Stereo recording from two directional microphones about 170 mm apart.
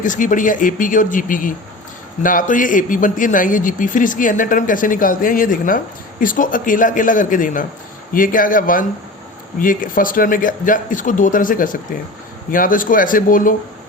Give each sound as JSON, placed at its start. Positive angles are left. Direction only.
{"t": 0.0, "sound": "a man's voice", "side_deg": 50}